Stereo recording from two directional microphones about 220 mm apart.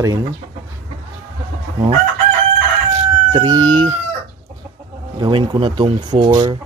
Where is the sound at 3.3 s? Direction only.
15° right (ahead or behind).